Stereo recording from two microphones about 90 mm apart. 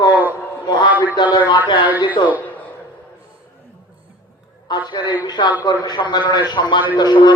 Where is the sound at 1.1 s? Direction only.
55° left (ahead or behind).